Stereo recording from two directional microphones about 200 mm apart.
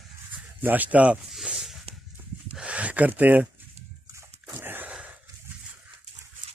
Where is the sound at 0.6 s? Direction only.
10° right (ahead or behind).